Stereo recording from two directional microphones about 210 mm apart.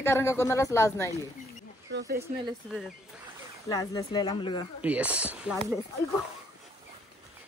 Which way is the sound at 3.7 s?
20° left (ahead or behind).